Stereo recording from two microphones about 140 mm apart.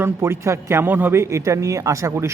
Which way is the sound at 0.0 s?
20° right (ahead or behind).